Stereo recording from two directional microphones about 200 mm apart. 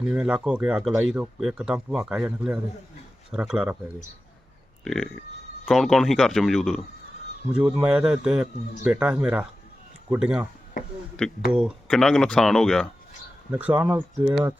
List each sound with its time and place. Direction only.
0.0 s speech: 5° right (ahead or behind)
4.8 s speech: centre (ahead or behind)
11.5 s speech: centre (ahead or behind)
13.8 s speech: 20° right (ahead or behind)